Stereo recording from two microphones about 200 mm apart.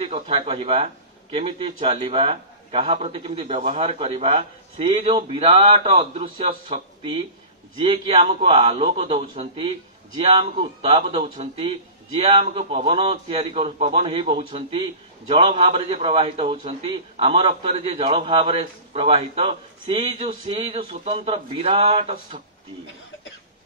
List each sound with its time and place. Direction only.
0.0 s a man's voice: 30° right (ahead or behind)